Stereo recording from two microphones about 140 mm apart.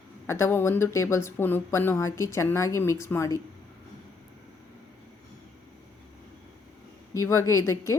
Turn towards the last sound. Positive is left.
turn(degrees=20)  # may be behind; listen again after turning